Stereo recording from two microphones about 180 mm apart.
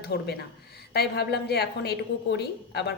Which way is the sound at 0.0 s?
65° left (ahead or behind).